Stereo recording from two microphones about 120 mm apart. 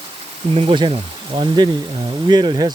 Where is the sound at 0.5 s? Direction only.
50° right (ahead or behind).